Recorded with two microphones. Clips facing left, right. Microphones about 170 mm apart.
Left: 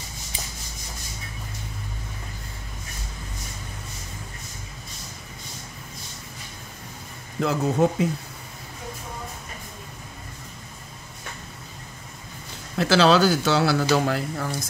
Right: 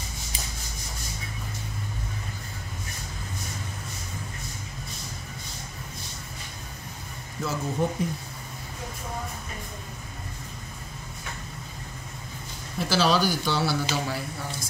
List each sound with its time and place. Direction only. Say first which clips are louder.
7.3 s speech: left 6 dB; 70° left (ahead or behind)
12.7 s speech: left 6 dB; 75° left (ahead or behind)